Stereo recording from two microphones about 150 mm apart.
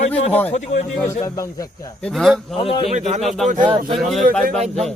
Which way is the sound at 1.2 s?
20° left (ahead or behind).